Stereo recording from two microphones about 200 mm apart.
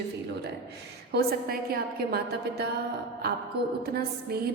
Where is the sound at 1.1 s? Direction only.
50° right (ahead or behind).